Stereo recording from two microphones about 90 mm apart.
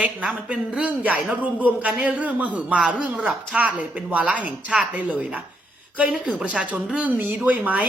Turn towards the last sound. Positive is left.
turn(degrees=-15)  # may be behind; listen again after turning